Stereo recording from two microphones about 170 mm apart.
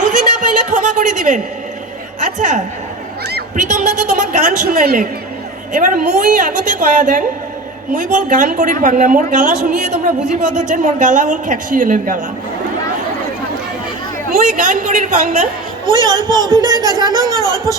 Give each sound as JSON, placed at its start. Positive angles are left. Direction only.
{"t": 0.0, "sound": "a sound", "side_deg": -45}
{"t": 2.2, "sound": "a woman's voice", "side_deg": -45}
{"t": 14.3, "sound": "a woman's voice", "side_deg": -50}
{"t": 16.0, "sound": "speech", "side_deg": -25}